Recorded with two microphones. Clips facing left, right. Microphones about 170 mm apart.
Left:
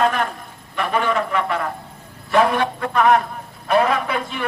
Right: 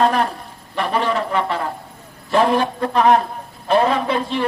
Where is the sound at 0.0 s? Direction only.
35° right (ahead or behind).